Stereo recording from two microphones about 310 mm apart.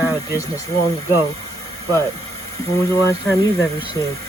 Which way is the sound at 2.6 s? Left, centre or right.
Centre.